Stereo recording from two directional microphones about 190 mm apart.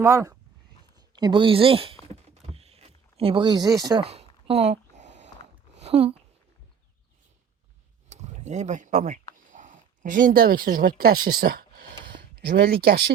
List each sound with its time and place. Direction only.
0.0 s speech: 15° right (ahead or behind)
2.5 s a sound: 30° right (ahead or behind)
5.8 s speech: 35° right (ahead or behind)
8.1 s speech: 35° right (ahead or behind)
12.1 s a sound: 65° right (ahead or behind)
12.8 s speech: 55° right (ahead or behind)